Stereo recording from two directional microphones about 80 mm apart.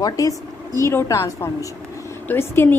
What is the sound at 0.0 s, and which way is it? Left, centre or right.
A woman's voice, left.